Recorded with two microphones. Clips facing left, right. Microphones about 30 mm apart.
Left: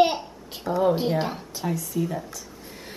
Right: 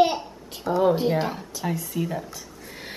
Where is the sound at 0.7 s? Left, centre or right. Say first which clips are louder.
Right 1 dB; centre.